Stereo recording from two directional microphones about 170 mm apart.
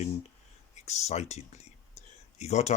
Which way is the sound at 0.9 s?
40° left (ahead or behind).